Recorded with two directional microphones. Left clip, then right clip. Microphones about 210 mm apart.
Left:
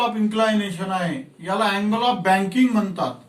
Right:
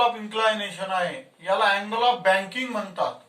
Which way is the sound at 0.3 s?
15° right (ahead or behind).